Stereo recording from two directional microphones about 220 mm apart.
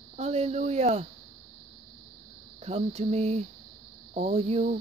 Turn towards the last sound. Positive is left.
turn(degrees=-30)  # may be behind; listen again after turning